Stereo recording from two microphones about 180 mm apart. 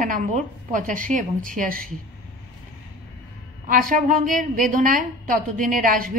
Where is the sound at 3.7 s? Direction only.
50° right (ahead or behind).